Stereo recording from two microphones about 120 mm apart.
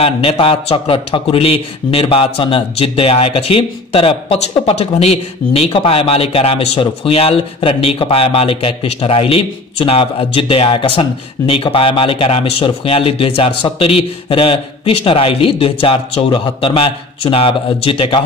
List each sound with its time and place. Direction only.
0.0 s a man's voice: 55° left (ahead or behind)